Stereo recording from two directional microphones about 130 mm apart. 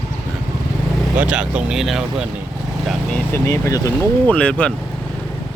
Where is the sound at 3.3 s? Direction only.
20° left (ahead or behind).